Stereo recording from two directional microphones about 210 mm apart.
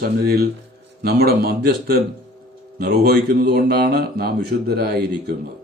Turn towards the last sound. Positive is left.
turn(degrees=-50)  # may be behind; listen again after turning